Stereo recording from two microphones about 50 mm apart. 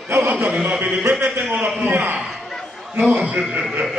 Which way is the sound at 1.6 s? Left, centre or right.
Right.